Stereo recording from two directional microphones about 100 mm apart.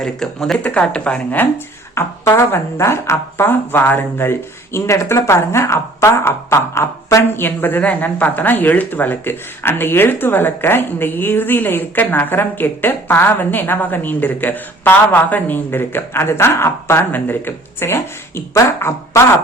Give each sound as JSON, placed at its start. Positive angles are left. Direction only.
{"t": 0.0, "sound": "speech", "side_deg": 5}
{"t": 2.0, "sound": "speech", "side_deg": 25}